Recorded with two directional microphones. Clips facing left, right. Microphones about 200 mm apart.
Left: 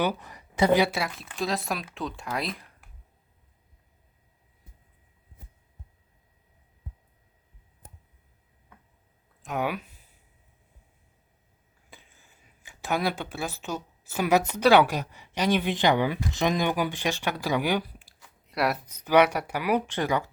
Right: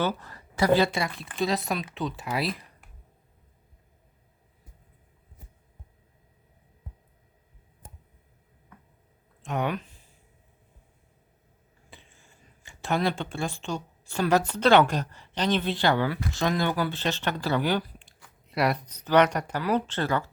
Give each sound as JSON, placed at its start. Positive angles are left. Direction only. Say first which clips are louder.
{"t": 0.0, "sound": "speech", "louder": "left 1 dB", "side_deg": 15}
{"t": 0.9, "sound": "speech", "louder": "right 2 dB", "side_deg": 0}
{"t": 9.4, "sound": "speech", "louder": "right 1 dB", "side_deg": 0}
{"t": 11.9, "sound": "speech", "louder": "right 1 dB", "side_deg": 0}
{"t": 18.4, "sound": "speech", "louder": "right 1 dB", "side_deg": 0}